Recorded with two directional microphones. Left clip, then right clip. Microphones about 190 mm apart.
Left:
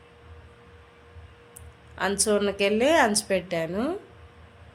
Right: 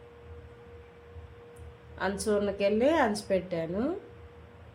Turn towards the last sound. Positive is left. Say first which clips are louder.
# left 4 dB
turn(degrees=10)  # may be behind; listen again after turning